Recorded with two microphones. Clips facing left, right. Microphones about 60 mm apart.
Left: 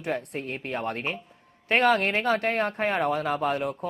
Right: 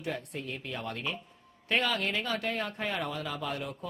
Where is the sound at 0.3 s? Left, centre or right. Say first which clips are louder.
Left 6 dB; left.